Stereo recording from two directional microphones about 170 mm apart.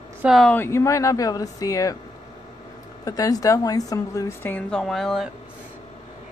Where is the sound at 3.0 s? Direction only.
20° left (ahead or behind); by 5.3 s centre (ahead or behind).